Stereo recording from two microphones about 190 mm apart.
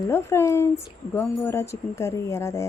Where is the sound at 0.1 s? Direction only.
15° left (ahead or behind).